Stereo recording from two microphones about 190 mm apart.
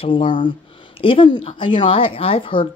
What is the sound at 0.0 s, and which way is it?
Speech, 25° left (ahead or behind).